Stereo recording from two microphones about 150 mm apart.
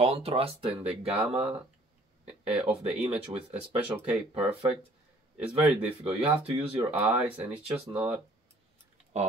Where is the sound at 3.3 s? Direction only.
25° right (ahead or behind).